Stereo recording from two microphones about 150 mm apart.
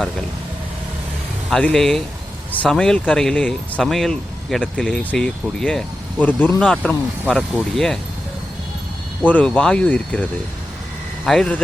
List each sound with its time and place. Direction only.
1.5 s speech: 5° left (ahead or behind)
9.2 s speech: 10° left (ahead or behind)
11.3 s speech: 5° left (ahead or behind)